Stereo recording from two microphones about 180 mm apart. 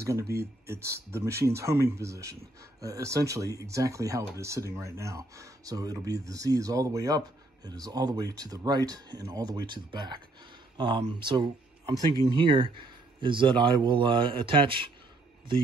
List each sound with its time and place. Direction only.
0.0 s speech: 15° right (ahead or behind)